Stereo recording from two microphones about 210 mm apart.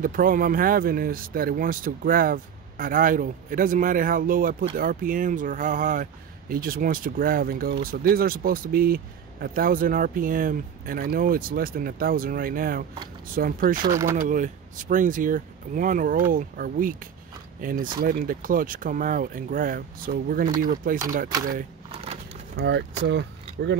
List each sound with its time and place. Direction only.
0.0 s speech: 40° right (ahead or behind)
13.8 s speech: 15° right (ahead or behind)
14.1 s speech: 40° right (ahead or behind)
21.9 s a sound: 30° right (ahead or behind)
22.6 s speech: 55° right (ahead or behind)